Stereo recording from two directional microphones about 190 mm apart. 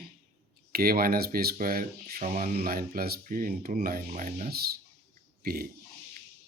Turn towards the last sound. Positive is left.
turn(degrees=-50)  # may be behind; listen again after turning